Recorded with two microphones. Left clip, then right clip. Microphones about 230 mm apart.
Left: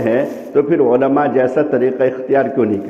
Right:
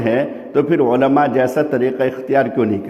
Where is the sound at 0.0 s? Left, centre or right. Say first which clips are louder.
Left 2 dB; right.